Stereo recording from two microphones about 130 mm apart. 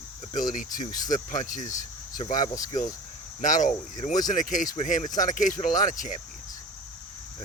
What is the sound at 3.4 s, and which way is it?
Speech, 75° left (ahead or behind).